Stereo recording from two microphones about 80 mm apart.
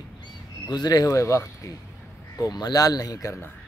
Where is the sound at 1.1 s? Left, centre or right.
Left.